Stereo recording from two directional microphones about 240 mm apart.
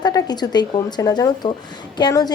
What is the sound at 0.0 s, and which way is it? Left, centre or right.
Speech, centre.